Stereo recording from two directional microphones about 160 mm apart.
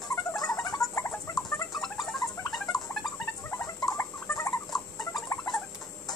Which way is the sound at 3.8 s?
25° left (ahead or behind).